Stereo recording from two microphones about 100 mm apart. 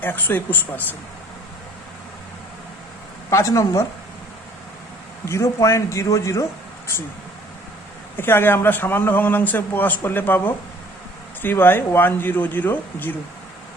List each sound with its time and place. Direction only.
0.0 s a man's voice: 20° left (ahead or behind)
3.2 s a man's voice: 35° left (ahead or behind)
5.2 s a man's voice: 30° left (ahead or behind)
8.1 s a man's voice: 20° left (ahead or behind)